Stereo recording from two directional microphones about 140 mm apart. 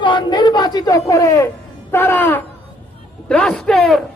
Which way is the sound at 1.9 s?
15° left (ahead or behind).